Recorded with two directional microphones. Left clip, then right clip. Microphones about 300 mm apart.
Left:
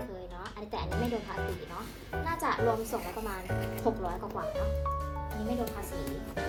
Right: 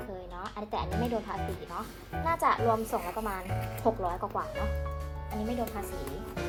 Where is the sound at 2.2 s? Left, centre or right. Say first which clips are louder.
Right 5 dB; centre.